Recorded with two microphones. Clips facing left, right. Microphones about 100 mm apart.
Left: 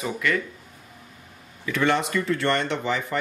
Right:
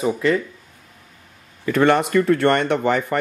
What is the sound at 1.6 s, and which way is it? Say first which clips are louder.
Speech: right 6 dB; 50° right (ahead or behind).